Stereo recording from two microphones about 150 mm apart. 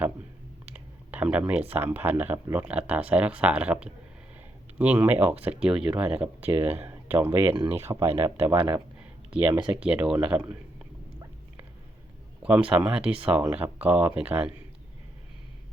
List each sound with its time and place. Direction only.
0.6 s speech: 10° right (ahead or behind)
12.4 s speech: 5° right (ahead or behind)